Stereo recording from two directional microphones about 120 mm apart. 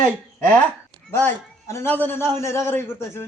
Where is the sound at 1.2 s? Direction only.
20° left (ahead or behind).